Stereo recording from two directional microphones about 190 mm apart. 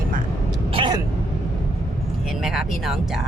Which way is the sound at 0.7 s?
25° right (ahead or behind).